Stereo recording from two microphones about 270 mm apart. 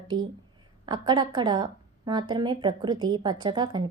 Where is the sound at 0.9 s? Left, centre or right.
Centre.